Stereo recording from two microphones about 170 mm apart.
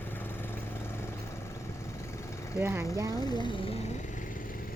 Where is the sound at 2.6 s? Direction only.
15° right (ahead or behind).